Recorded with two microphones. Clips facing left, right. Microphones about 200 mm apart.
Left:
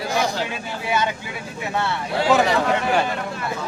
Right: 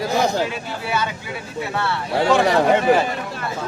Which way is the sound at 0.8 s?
20° left (ahead or behind).